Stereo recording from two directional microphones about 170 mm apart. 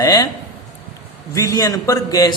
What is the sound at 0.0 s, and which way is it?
Speech, 20° left (ahead or behind).